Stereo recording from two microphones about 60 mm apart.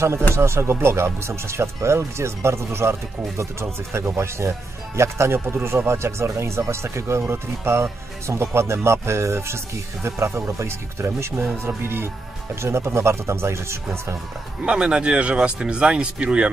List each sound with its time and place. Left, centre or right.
0.3 s speech: right
14.6 s speech: centre